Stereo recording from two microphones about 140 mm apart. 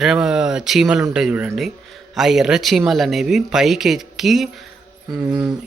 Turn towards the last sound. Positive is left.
turn(degrees=-10)  # may be behind; listen again after turning